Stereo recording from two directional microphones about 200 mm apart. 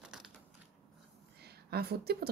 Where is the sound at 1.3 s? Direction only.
55° right (ahead or behind).